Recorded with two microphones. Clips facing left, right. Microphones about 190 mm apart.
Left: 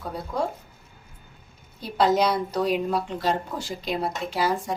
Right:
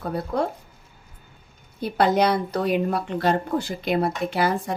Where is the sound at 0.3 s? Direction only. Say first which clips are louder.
Right 2 dB; 65° right (ahead or behind).